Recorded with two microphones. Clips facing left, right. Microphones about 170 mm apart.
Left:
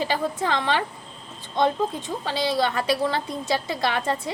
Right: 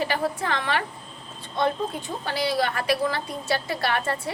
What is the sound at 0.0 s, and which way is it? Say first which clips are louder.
Speech: left 1 dB; 25° left (ahead or behind).